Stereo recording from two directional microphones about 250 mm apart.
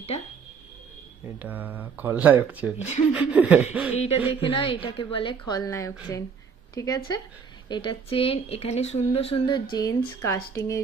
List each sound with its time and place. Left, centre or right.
1.4 s speech: centre
3.1 s a sound: centre
3.9 s speech: left